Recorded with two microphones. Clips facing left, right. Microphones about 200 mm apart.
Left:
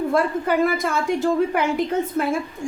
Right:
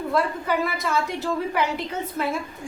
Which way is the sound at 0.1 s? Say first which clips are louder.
Even; 50° left (ahead or behind).